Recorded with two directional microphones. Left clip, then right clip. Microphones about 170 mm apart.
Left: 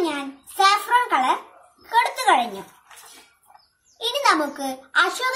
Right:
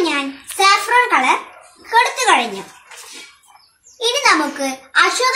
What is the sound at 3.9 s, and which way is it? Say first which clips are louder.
A child's voice: right 5 dB; 15° left (ahead or behind).